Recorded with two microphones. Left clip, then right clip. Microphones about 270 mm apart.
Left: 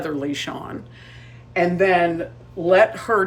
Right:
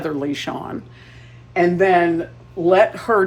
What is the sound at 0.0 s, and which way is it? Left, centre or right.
Speech, centre.